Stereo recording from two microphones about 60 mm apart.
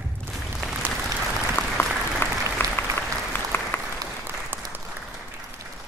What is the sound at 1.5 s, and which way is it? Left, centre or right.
Applause, left.